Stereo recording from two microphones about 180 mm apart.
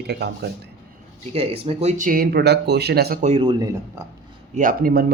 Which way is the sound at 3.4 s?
25° right (ahead or behind).